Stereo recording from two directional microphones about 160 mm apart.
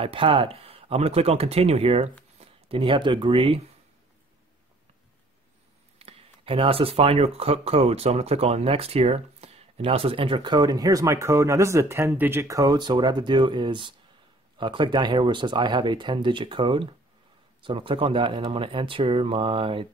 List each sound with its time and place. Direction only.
0.0 s speech: 35° right (ahead or behind)
5.9 s speech: 35° right (ahead or behind)